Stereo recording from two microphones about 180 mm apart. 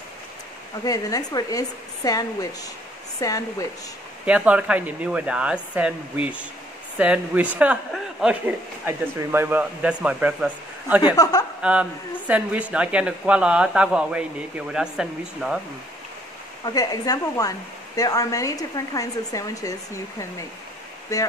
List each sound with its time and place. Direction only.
0.8 s speech: 20° left (ahead or behind)
4.3 s speech: 5° right (ahead or behind)
11.2 s speech: 20° left (ahead or behind)
11.6 s speech: 5° right (ahead or behind)
16.6 s speech: 20° left (ahead or behind)